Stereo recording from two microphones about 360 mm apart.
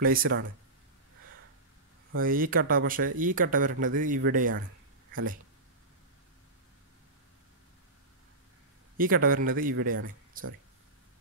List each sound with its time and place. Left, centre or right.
0.0 s speech: right
2.1 s speech: right
8.9 s speech: right